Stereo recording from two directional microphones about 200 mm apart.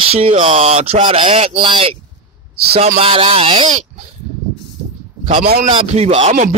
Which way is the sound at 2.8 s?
30° right (ahead or behind).